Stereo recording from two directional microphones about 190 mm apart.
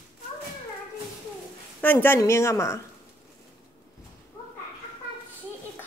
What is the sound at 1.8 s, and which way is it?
A woman's voice, 10° left (ahead or behind).